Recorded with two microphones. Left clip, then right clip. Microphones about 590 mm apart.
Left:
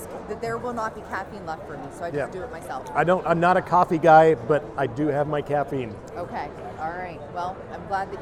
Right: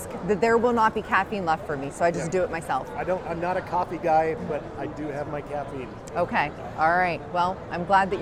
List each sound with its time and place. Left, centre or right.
0.3 s speech: right
3.0 s a man's voice: left
6.1 s speech: right